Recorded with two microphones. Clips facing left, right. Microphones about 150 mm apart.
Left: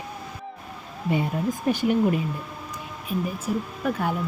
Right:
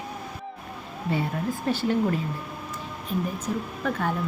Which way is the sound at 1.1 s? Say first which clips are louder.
Left 3 dB; 15° left (ahead or behind).